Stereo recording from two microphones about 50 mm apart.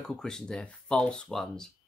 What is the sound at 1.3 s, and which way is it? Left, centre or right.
Speech, centre.